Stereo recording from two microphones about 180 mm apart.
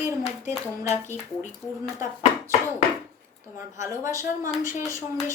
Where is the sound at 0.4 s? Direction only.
40° left (ahead or behind).